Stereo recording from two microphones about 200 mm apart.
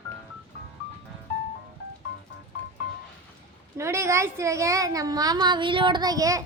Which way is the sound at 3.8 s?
15° right (ahead or behind).